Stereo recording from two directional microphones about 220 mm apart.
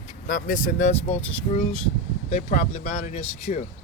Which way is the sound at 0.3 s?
40° left (ahead or behind).